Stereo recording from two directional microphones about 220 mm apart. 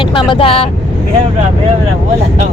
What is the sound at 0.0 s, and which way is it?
Speech, 20° left (ahead or behind).